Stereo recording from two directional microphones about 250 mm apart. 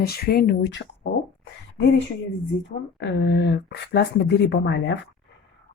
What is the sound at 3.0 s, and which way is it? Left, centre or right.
Speech, left.